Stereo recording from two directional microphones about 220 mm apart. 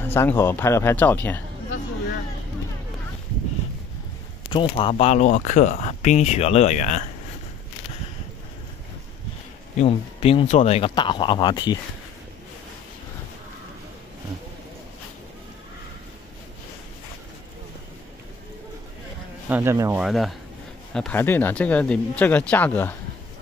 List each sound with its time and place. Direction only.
0.0 s speech: 10° left (ahead or behind)
4.5 s speech: 25° left (ahead or behind)
9.8 s speech: 25° left (ahead or behind)
19.5 s speech: 10° right (ahead or behind); by 22.9 s 10° left (ahead or behind)